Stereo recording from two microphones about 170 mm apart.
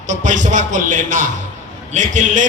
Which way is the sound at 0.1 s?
45° right (ahead or behind).